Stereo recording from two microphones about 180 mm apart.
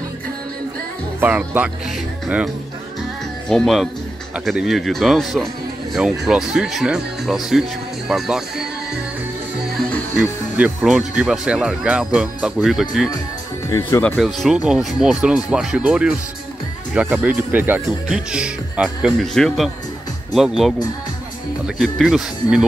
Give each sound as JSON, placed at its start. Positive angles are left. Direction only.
{"t": 1.2, "sound": "speech", "side_deg": -10}
{"t": 9.8, "sound": "music", "side_deg": 5}
{"t": 10.6, "sound": "speech", "side_deg": -5}
{"t": 13.7, "sound": "speech", "side_deg": 20}
{"t": 14.0, "sound": "speech", "side_deg": 5}
{"t": 21.8, "sound": "speech", "side_deg": 0}